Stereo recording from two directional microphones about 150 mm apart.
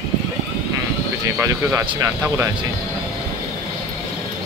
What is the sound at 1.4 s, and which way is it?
Speech, 20° right (ahead or behind).